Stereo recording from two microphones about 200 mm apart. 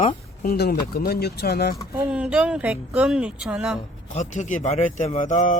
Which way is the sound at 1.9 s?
10° right (ahead or behind).